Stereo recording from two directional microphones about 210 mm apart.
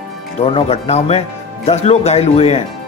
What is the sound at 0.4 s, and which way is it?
Speech, 25° left (ahead or behind).